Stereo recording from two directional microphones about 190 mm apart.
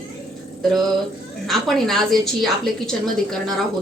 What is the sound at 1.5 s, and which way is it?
A woman's voice, centre (ahead or behind).